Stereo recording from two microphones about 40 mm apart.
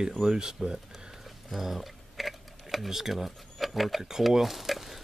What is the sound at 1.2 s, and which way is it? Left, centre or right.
Typing, centre.